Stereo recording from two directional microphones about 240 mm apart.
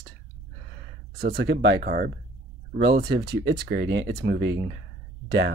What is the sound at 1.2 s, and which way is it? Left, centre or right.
Speech, right.